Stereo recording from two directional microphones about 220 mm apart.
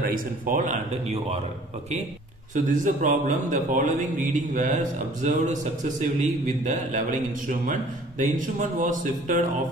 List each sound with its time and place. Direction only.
0.0 s a man's voice: 35° right (ahead or behind)
2.5 s a man's voice: 35° right (ahead or behind)